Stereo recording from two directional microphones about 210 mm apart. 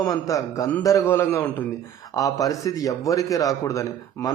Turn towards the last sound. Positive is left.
turn(degrees=15)  # may be behind; listen again after turning